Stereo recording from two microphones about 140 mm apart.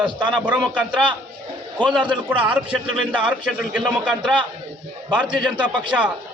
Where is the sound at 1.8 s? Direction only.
10° left (ahead or behind).